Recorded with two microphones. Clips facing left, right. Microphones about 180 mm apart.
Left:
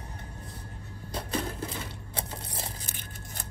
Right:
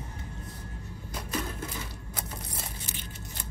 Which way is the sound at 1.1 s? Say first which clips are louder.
Left 2 dB; 30° left (ahead or behind).